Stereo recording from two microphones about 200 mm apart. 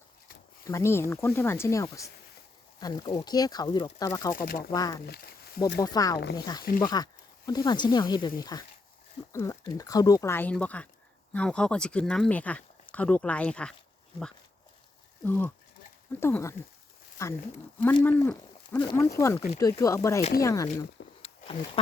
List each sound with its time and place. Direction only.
0.6 s speech: 15° left (ahead or behind)
4.4 s speech: 45° left (ahead or behind)
4.7 s speech: 20° left (ahead or behind)
5.0 s speech: 50° left (ahead or behind)
5.8 s speech: 20° left (ahead or behind)
15.2 s speech: 10° left (ahead or behind)
18.0 s speech: 10° left (ahead or behind)
18.8 s speech: 20° left (ahead or behind)
21.2 s a sound: 30° left (ahead or behind)